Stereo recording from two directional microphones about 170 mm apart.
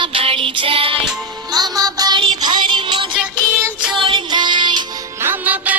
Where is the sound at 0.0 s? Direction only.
35° right (ahead or behind).